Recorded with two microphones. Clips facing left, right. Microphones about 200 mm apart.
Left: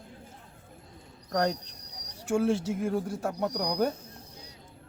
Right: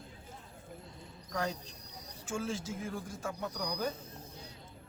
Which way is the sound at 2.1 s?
65° left (ahead or behind).